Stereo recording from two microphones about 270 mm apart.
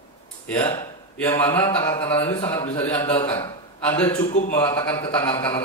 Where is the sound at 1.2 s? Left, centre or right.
Centre.